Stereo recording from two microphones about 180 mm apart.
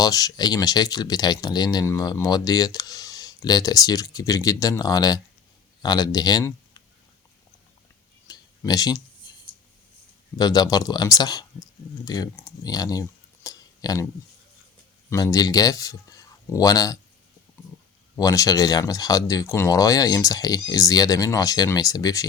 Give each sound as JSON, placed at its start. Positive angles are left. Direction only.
{"t": 0.0, "sound": "speech", "side_deg": 20}
{"t": 8.3, "sound": "a sound", "side_deg": 20}
{"t": 10.3, "sound": "speech", "side_deg": 20}
{"t": 15.1, "sound": "speech", "side_deg": 20}
{"t": 18.2, "sound": "speech", "side_deg": 20}